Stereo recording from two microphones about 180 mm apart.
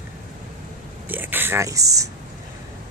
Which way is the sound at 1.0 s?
10° right (ahead or behind).